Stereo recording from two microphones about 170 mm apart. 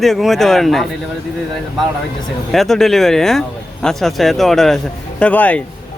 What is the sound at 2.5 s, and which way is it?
Speech, centre (ahead or behind).